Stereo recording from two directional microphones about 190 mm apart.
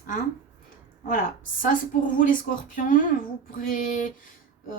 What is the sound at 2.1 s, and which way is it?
A woman's voice, 45° left (ahead or behind).